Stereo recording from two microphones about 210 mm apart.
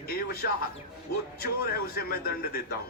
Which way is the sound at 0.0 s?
45° left (ahead or behind).